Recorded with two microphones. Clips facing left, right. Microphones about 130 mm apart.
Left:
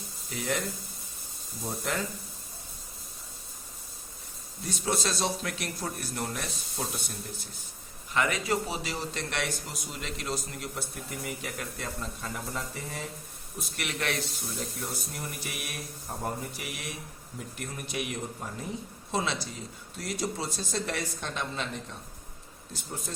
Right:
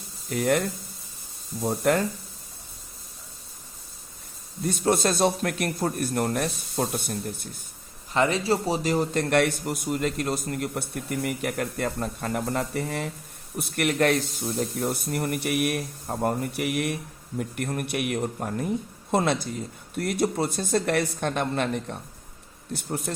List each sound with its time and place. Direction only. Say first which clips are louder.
0.3 s a man's voice: right 9 dB; 55° right (ahead or behind)
1.6 s a man's voice: right 10 dB; 55° right (ahead or behind)
4.6 s speech: right 8 dB; 50° right (ahead or behind)
8.1 s a man's voice: right 5 dB; 30° right (ahead or behind); by 14.3 s 45° right (ahead or behind)
14.6 s a man's voice: right 10 dB; 60° right (ahead or behind)